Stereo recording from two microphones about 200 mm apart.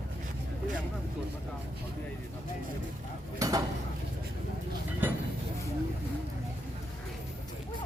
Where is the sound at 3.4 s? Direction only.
15° right (ahead or behind).